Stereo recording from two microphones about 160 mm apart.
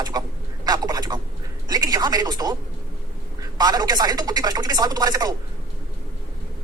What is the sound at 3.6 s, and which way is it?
Speech, 25° right (ahead or behind).